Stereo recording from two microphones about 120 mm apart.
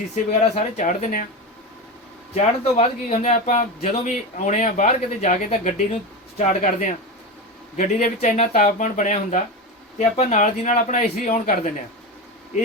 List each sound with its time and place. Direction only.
0.3 s speech: 85° left
2.3 s speech: 60° left (ahead or behind)
6.3 s speech: 90° left
7.8 s speech: 70° left (ahead or behind); by 9.4 s 90° left
10.0 s speech: 65° left (ahead or behind)